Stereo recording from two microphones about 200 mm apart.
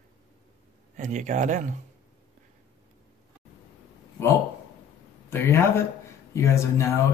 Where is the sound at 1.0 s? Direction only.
35° right (ahead or behind).